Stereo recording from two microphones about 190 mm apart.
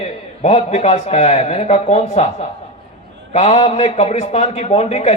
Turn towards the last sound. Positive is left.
turn(degrees=35)  # may be behind; listen again after turning